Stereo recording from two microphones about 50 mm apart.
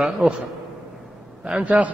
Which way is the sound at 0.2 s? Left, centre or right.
Centre.